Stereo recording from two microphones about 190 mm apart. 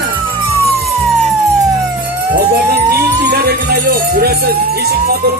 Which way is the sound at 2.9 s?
55° right (ahead or behind).